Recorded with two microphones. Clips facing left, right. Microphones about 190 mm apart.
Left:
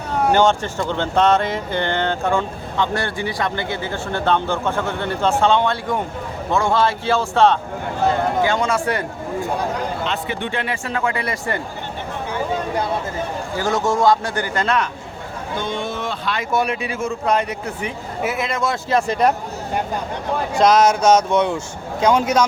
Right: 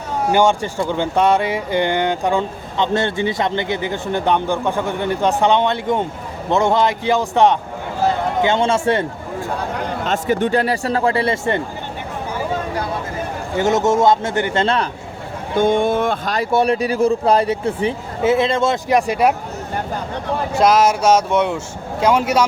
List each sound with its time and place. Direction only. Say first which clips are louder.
0.3 s a man's voice: right 4 dB; 10° right (ahead or behind)
10.1 s speech: right 7 dB; 45° right (ahead or behind); by 11.6 s 25° right (ahead or behind)
13.6 s a man's voice: right 4 dB; 20° right (ahead or behind)
15.5 s speech: right 10 dB; 50° right (ahead or behind); by 18.8 s 25° right (ahead or behind)
18.9 s speech: even; 15° right (ahead or behind)
20.6 s speech: even; 5° right (ahead or behind)